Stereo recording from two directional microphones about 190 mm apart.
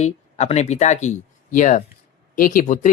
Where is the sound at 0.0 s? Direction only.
35° left (ahead or behind).